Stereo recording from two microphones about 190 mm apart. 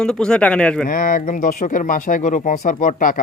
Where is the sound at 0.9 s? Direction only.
45° left (ahead or behind).